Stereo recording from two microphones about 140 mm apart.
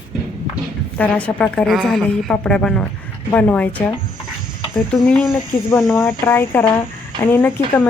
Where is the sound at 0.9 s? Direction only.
5° left (ahead or behind).